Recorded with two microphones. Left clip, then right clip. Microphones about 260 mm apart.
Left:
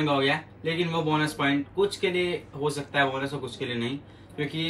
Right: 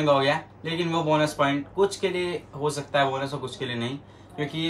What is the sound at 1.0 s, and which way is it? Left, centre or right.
Speech, centre.